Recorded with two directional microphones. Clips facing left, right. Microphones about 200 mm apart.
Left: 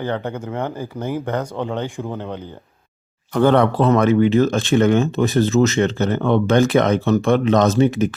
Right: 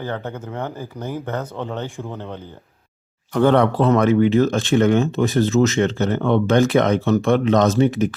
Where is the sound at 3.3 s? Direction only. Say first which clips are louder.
Left 1 dB; 35° left (ahead or behind).